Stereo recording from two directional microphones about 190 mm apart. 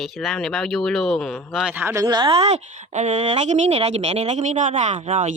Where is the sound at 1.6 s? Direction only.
10° right (ahead or behind).